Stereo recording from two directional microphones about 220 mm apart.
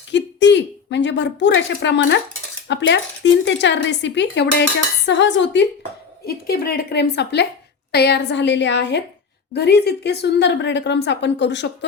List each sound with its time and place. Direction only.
0.1 s a sound: 55° left (ahead or behind)
2.6 s a woman's voice: 55° left (ahead or behind)
6.2 s a woman's voice: 45° left (ahead or behind)